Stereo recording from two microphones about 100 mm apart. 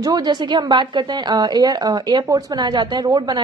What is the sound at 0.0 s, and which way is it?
A woman's voice, 45° right (ahead or behind).